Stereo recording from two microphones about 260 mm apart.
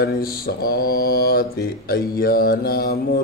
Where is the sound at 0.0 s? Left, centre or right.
Left.